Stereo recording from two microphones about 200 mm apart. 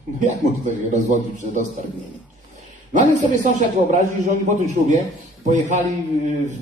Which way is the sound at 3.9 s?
35° right (ahead or behind).